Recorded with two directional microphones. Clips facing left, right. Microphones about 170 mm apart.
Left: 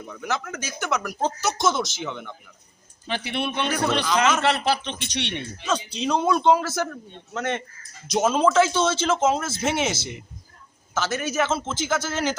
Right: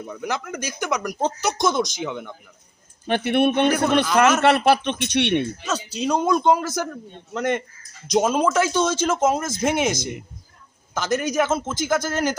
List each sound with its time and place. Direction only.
0.1 s speech: 10° right (ahead or behind)
3.1 s speech: 55° right (ahead or behind)
5.6 s speech: 10° right (ahead or behind)